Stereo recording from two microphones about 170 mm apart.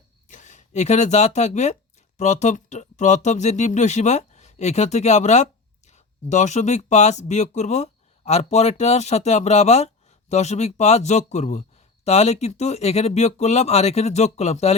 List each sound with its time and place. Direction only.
0.3 s speech: 45° left (ahead or behind)